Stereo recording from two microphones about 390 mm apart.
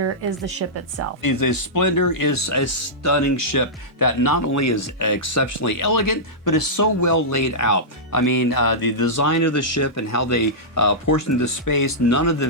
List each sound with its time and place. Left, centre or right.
1.2 s speech: left
9.1 s speech: left